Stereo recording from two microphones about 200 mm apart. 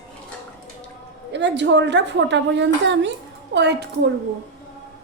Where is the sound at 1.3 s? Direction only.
60° right (ahead or behind).